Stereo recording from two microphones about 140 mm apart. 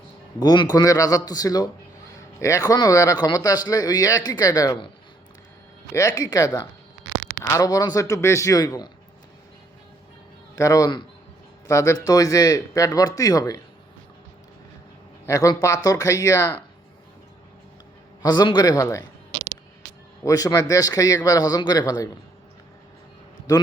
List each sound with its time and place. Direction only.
0.3 s a man's voice: 30° left (ahead or behind)
5.9 s a man's voice: 20° left (ahead or behind)
10.5 s a man's voice: 25° left (ahead or behind)
15.3 s a man's voice: 25° left (ahead or behind)
18.2 s a man's voice: 30° left (ahead or behind)
19.3 s a sound: 30° right (ahead or behind)
20.2 s a man's voice: 25° left (ahead or behind)